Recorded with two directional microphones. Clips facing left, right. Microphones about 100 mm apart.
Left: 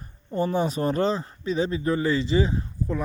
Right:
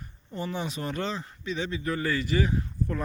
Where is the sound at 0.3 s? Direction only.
40° left (ahead or behind).